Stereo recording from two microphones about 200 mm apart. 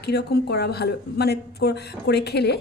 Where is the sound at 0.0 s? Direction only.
55° left (ahead or behind).